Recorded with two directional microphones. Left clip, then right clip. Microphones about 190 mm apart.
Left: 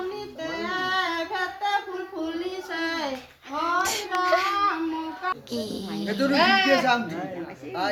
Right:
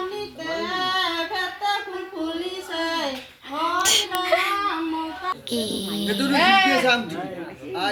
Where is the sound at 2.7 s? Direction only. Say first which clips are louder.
Right 4 dB; 25° right (ahead or behind).